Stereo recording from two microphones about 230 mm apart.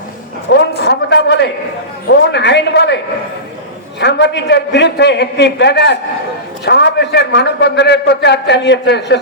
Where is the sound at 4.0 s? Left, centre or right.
Left.